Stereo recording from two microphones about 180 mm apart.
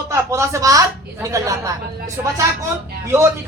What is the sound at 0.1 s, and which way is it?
Speech, 15° right (ahead or behind).